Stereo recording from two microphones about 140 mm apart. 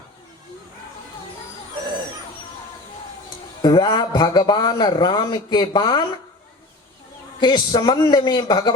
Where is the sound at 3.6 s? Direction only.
30° left (ahead or behind).